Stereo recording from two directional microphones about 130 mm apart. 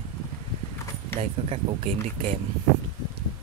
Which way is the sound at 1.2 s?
55° right (ahead or behind).